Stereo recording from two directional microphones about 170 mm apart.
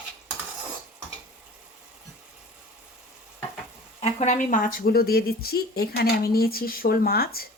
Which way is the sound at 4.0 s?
45° left (ahead or behind).